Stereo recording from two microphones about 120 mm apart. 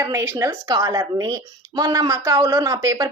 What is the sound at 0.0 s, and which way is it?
A woman's voice, 25° right (ahead or behind).